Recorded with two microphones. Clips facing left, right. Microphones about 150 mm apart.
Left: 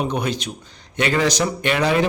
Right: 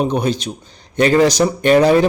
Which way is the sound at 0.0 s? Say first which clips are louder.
Right 5 dB; 30° right (ahead or behind).